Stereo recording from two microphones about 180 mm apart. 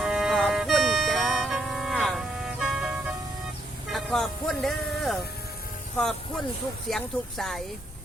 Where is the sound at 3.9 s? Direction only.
Centre (ahead or behind).